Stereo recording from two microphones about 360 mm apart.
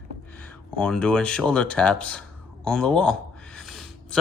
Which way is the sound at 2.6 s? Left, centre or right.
Centre.